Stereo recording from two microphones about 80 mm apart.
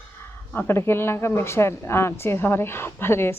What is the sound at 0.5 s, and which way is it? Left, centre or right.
A woman's voice, left.